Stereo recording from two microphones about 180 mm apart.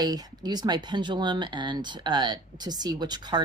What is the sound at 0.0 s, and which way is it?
Speech, 20° right (ahead or behind).